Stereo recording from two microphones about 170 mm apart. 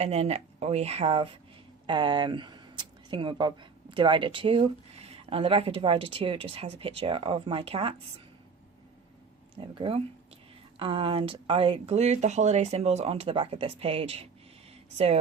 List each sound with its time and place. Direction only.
0.0 s speech: 40° right (ahead or behind)
9.7 s speech: 30° right (ahead or behind)